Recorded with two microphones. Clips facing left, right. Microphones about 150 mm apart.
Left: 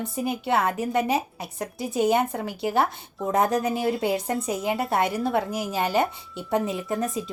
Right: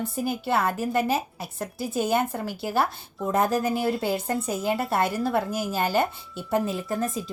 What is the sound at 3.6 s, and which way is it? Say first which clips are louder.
Speech: even; centre (ahead or behind).